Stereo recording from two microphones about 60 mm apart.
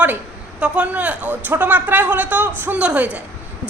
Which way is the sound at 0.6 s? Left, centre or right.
Right.